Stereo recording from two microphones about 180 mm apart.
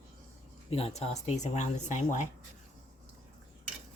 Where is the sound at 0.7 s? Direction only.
35° left (ahead or behind).